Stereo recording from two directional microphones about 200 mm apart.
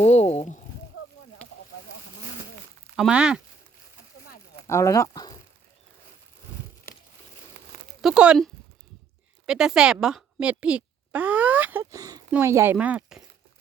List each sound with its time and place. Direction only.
0.0 s a sound: 35° left (ahead or behind)
2.9 s speech: 5° right (ahead or behind)
4.6 s speech: 15° left (ahead or behind)
8.0 s speech: 5° right (ahead or behind)
9.5 s speech: 5° right (ahead or behind)